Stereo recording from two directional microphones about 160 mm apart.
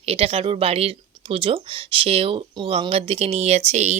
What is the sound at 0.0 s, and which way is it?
Speech, 40° right (ahead or behind).